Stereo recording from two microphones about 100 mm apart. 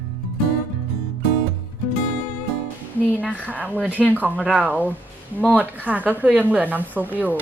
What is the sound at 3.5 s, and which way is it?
Speech, 15° right (ahead or behind).